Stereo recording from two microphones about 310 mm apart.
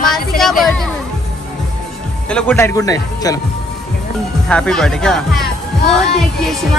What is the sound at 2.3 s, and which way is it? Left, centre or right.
Speech, centre.